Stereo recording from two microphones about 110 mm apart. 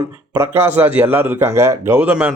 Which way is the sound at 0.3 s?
25° right (ahead or behind).